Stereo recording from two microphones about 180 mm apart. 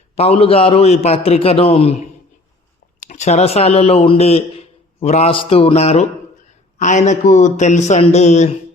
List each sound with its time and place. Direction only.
0.2 s a man's voice: 35° left (ahead or behind)